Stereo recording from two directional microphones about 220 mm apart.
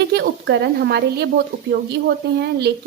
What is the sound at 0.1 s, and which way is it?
A woman's voice, 50° right (ahead or behind).